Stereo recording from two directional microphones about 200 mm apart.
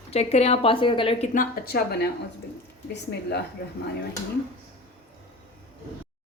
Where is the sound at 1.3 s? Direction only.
45° left (ahead or behind).